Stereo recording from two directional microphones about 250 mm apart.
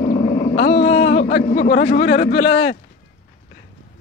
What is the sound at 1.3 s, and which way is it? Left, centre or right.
Speech, left.